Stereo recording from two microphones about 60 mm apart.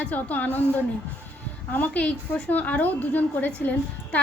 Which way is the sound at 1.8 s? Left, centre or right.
Left.